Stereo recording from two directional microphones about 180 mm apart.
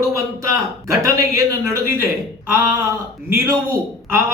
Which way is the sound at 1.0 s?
15° right (ahead or behind).